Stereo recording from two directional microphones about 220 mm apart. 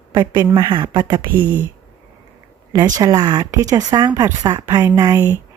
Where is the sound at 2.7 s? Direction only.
15° right (ahead or behind).